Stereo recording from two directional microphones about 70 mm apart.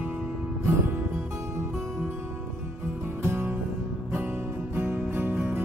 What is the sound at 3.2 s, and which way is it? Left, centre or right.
Music, right.